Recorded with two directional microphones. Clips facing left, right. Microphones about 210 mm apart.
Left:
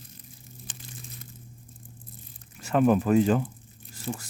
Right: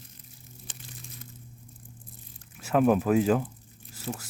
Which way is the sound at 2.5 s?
5° right (ahead or behind).